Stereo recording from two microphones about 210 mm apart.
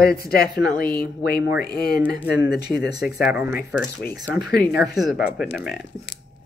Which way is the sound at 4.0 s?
50° left (ahead or behind).